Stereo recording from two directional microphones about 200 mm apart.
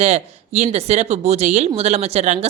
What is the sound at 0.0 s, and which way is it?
Speech, 35° right (ahead or behind).